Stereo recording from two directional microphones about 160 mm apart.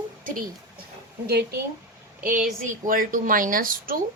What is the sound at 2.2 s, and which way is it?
A woman's voice, 60° right (ahead or behind).